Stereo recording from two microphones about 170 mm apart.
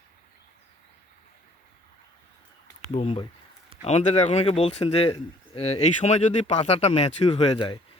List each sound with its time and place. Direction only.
2.9 s speech: 35° left (ahead or behind)
7.3 s speech: 25° left (ahead or behind)